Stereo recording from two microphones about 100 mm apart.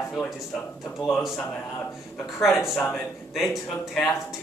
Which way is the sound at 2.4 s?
Centre (ahead or behind).